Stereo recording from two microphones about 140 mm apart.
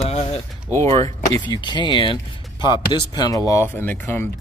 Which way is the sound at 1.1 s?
25° left (ahead or behind).